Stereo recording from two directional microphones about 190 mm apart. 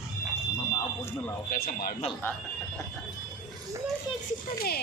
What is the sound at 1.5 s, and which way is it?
Speech, 50° left (ahead or behind).